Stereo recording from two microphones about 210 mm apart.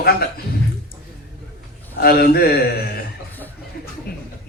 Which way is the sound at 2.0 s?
45° left (ahead or behind).